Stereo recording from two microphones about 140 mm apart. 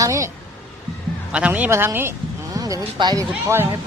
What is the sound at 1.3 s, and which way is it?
Speech, 10° right (ahead or behind).